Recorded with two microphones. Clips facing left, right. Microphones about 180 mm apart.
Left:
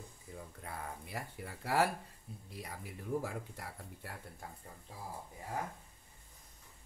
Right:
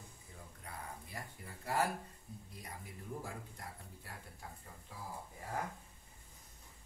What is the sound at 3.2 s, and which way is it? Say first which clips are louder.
Speech: left 6 dB; 75° left (ahead or behind).